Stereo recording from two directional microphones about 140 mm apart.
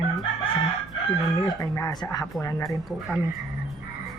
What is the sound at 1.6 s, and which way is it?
Speech, 25° left (ahead or behind).